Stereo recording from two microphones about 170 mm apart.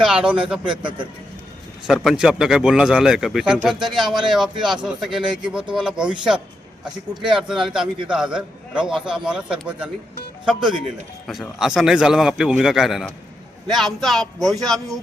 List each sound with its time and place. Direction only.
0.0 s a man's voice: 5° right (ahead or behind)
7.1 s speech: 30° right (ahead or behind)
7.3 s a man's voice: 5° right (ahead or behind)